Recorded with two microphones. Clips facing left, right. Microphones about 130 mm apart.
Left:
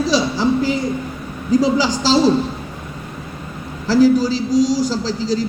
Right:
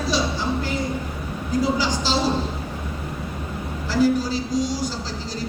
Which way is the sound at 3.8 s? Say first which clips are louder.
Left 7 dB; 90° left.